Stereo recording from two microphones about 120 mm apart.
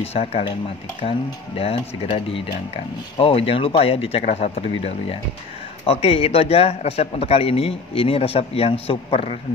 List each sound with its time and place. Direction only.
0.0 s a man's voice: 60° left (ahead or behind)
4.2 s a man's voice: 65° left (ahead or behind)